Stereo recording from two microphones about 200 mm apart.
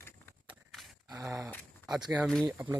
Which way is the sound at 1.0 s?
15° right (ahead or behind).